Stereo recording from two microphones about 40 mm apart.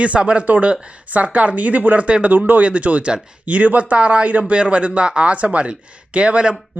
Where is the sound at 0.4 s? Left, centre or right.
Right.